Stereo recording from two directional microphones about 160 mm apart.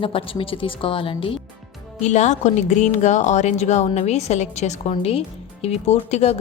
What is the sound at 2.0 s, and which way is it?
Speech, 45° left (ahead or behind).